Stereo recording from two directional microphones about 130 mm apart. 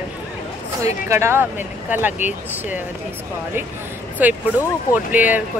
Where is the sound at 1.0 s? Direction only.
20° right (ahead or behind).